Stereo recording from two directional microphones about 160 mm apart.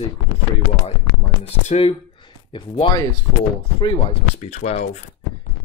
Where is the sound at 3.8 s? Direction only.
45° left (ahead or behind).